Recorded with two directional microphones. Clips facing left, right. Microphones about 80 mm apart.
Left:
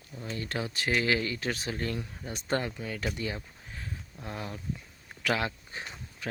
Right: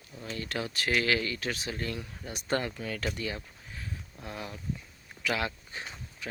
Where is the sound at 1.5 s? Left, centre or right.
Left.